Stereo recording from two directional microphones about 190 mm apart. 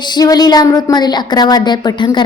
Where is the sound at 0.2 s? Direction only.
20° left (ahead or behind).